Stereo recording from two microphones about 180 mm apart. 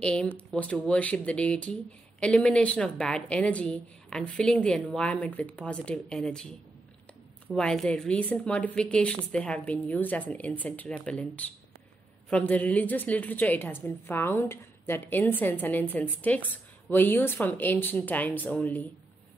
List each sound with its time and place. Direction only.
0.0 s a woman's voice: 5° left (ahead or behind)
7.5 s a woman's voice: 5° left (ahead or behind)